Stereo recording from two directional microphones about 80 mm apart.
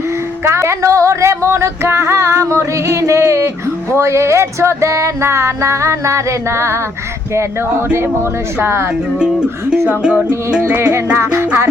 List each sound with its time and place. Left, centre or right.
0.4 s music: right
8.6 s music: right
9.1 s speech: centre
10.2 s music: right